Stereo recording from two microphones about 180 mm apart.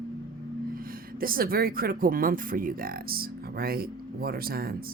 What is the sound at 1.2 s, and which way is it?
Speech, 55° right (ahead or behind).